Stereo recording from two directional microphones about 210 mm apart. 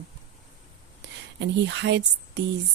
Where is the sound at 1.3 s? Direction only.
60° right (ahead or behind).